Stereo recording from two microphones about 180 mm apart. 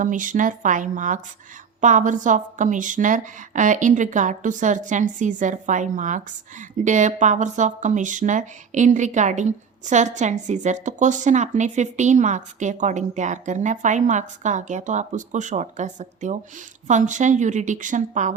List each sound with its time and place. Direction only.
0.0 s a woman's voice: 45° right (ahead or behind)